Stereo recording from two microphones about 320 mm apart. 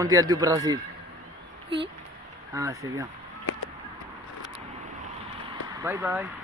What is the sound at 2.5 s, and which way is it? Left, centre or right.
Speech, centre.